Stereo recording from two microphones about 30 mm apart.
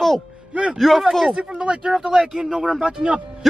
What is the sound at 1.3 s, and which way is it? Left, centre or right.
Speech, right.